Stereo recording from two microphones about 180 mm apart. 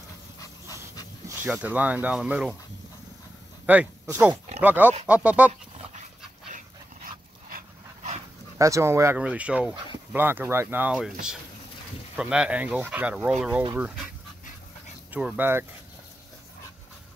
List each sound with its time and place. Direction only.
0.4 s pant: 20° left (ahead or behind)
1.4 s speech: 10° right (ahead or behind)
3.6 s speech: 5° right (ahead or behind)
7.4 s dog: 45° right (ahead or behind)
8.5 s speech: 15° right (ahead or behind)
12.2 s speech: 5° right (ahead or behind)
15.0 s speech: 10° right (ahead or behind)